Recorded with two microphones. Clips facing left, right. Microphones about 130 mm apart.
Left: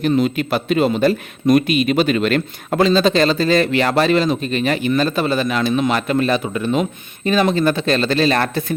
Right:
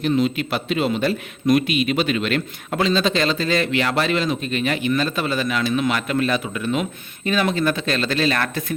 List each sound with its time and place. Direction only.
0.1 s a man's voice: 45° left (ahead or behind)